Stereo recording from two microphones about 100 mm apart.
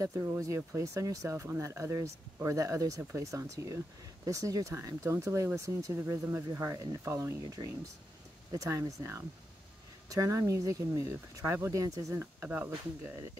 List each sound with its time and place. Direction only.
0.0 s speech: 30° right (ahead or behind)
12.4 s speech: 15° right (ahead or behind)